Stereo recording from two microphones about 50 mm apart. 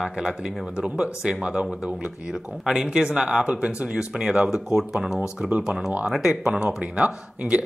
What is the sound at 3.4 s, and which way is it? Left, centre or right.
Speech, right.